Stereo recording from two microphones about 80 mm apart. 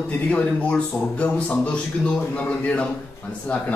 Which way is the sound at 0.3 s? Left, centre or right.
Centre.